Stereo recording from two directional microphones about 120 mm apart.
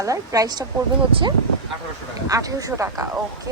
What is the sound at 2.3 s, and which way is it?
Speech, 30° right (ahead or behind).